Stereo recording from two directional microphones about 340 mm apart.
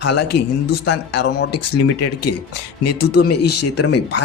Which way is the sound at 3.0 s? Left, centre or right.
Left.